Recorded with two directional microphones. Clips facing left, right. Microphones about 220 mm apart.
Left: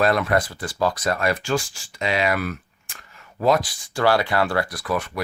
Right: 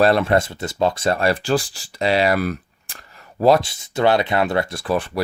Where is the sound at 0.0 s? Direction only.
30° right (ahead or behind).